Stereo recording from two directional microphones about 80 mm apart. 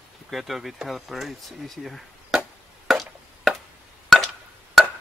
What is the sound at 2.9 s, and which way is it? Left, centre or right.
Chop, centre.